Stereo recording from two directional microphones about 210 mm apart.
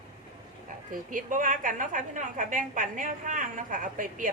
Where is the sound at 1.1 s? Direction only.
40° right (ahead or behind).